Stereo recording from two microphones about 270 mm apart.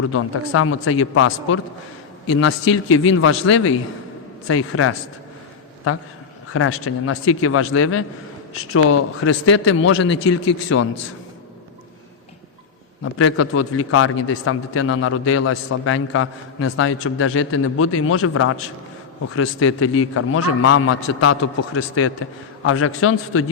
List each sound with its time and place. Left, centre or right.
0.0 s a man's voice: left
6.5 s a man's voice: left
9.3 s a man's voice: left
9.7 s a man's voice: left
13.0 s a man's voice: left